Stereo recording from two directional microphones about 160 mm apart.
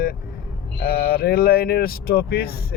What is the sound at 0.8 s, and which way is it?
Speech, 75° left (ahead or behind).